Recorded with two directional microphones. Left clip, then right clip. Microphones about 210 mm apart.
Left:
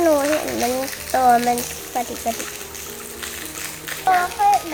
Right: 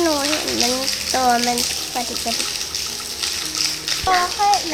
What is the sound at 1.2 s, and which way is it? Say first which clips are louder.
Speech: left 3 dB; 40° left (ahead or behind).